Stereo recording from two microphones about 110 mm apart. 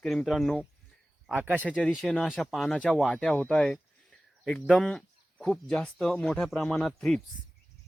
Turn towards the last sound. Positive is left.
turn(degrees=5)  # may be behind; listen again after turning